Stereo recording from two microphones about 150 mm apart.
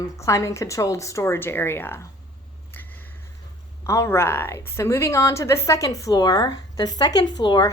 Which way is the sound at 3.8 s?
20° left (ahead or behind).